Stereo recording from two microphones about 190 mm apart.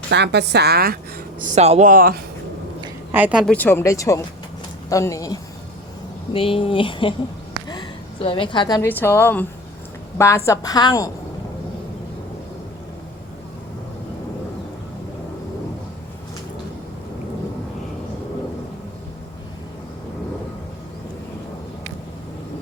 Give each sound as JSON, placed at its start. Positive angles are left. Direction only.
{"t": 0.1, "sound": "a woman's voice", "side_deg": -60}
{"t": 1.5, "sound": "speech", "side_deg": -35}
{"t": 3.1, "sound": "a woman's voice", "side_deg": -10}
{"t": 3.5, "sound": "speech", "side_deg": 10}
{"t": 6.3, "sound": "a woman's voice", "side_deg": 30}
{"t": 8.2, "sound": "a woman's voice", "side_deg": 25}